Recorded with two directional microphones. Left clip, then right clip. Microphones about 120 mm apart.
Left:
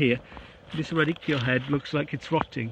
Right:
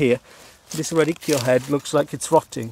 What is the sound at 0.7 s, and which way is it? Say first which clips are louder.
Speech: right 6 dB; 20° right (ahead or behind).